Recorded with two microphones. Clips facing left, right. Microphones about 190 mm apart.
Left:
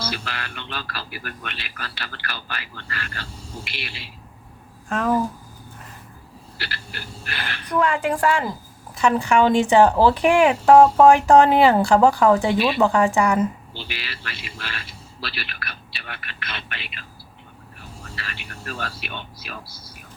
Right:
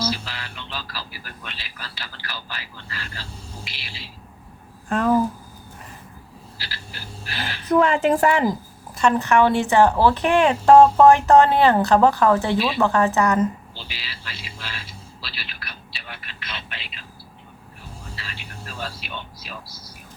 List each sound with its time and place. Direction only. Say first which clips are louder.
0.1 s speech: right 1 dB; 60° left (ahead or behind)
4.9 s speech: right 2 dB; centre (ahead or behind)
6.6 s speech: left 4 dB; 60° left (ahead or behind)
7.7 s speech: right 4 dB; 25° right (ahead or behind)
9.0 s speech: even; 10° left (ahead or behind)
13.7 s speech: left 4 dB; 60° left (ahead or behind)
18.2 s speech: left 1 dB; 65° left (ahead or behind)